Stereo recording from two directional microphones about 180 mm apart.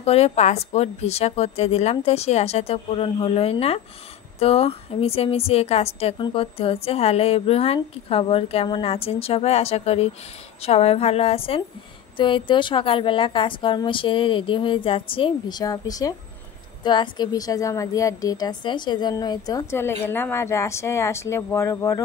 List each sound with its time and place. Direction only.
0.0 s a woman's voice: 35° left (ahead or behind); by 22.0 s 15° left (ahead or behind)